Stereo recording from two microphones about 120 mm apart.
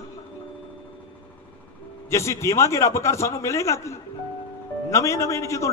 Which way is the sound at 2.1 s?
25° left (ahead or behind).